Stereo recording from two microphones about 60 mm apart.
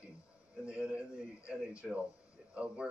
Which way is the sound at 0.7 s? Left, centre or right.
Centre.